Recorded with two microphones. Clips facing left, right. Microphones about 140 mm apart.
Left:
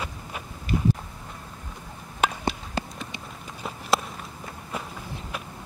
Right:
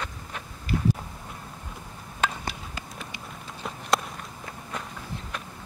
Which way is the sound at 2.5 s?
30° left (ahead or behind).